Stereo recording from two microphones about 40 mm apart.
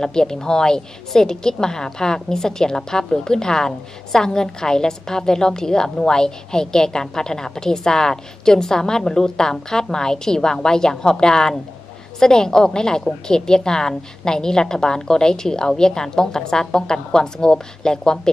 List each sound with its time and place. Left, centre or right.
0.0 s a woman's voice: centre